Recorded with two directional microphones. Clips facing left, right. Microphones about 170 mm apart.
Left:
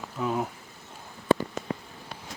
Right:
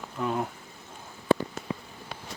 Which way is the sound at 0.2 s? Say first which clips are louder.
Left 1 dB; centre (ahead or behind).